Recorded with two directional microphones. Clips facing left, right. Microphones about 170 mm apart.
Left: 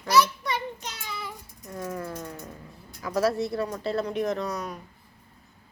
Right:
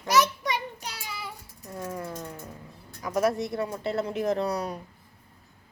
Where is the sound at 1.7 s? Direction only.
10° right (ahead or behind).